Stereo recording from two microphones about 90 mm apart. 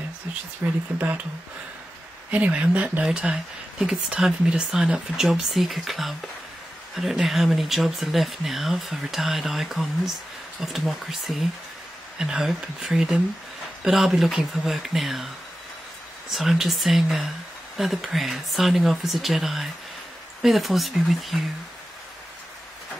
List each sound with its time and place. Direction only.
0.6 s speech: 25° right (ahead or behind)
2.3 s speech: 15° right (ahead or behind)
16.3 s speech: centre (ahead or behind)